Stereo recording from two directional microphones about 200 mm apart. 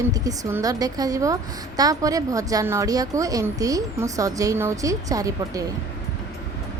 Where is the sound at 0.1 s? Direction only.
15° right (ahead or behind).